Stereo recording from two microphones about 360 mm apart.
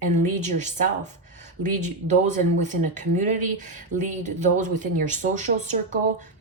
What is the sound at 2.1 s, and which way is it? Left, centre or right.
Speech, centre.